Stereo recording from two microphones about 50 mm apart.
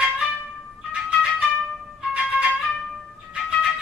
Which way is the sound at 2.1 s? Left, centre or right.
Centre.